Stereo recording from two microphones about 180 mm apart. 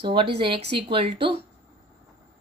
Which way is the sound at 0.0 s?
30° right (ahead or behind).